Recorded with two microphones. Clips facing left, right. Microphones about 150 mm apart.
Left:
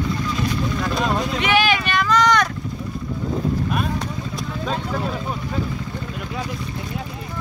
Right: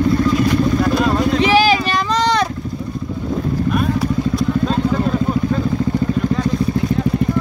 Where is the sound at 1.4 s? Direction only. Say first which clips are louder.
Right 5 dB; 35° right (ahead or behind).